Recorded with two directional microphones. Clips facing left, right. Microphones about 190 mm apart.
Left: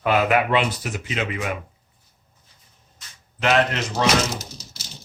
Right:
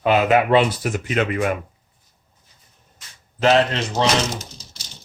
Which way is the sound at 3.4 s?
30° right (ahead or behind).